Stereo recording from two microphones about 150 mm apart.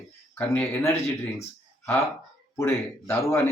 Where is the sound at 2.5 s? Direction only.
15° left (ahead or behind).